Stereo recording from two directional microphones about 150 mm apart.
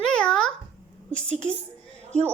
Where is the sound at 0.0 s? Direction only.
5° left (ahead or behind).